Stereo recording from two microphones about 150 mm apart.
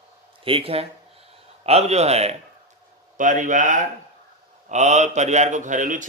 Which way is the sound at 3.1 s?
60° right (ahead or behind).